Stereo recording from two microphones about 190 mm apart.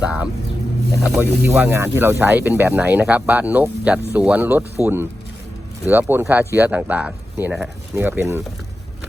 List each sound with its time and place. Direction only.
0.0 s speech: 5° right (ahead or behind)